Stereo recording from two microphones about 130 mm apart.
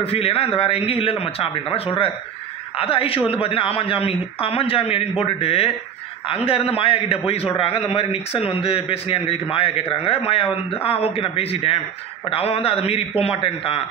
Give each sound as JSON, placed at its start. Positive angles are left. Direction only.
{"t": 0.0, "sound": "a man's voice", "side_deg": 45}